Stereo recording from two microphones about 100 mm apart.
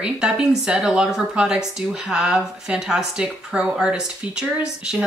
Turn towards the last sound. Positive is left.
turn(degrees=-5)  # may be behind; listen again after turning